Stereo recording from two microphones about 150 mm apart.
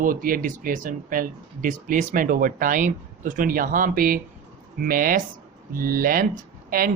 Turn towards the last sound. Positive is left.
turn(degrees=-70)  # may be behind; listen again after turning